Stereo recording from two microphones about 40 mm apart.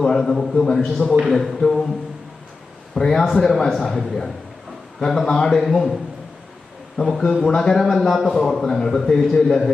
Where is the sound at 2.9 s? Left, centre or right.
Centre.